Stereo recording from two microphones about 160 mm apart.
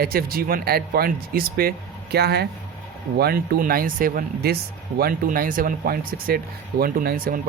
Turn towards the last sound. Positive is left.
turn(degrees=-65)  # may be behind; listen again after turning